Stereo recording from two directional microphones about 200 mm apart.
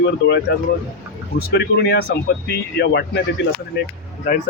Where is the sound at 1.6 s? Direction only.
55° left (ahead or behind).